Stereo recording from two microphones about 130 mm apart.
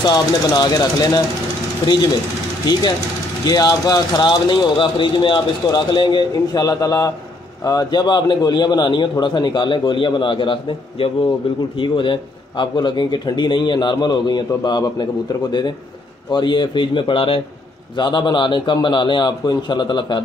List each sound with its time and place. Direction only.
0.0 s speech: 35° left (ahead or behind)
2.6 s speech: 30° left (ahead or behind)
16.3 s speech: 35° left (ahead or behind)